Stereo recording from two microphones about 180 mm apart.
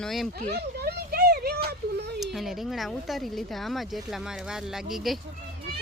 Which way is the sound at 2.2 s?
Centre (ahead or behind).